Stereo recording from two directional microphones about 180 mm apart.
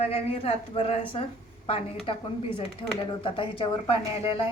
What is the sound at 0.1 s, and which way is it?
A woman's voice, 35° left (ahead or behind).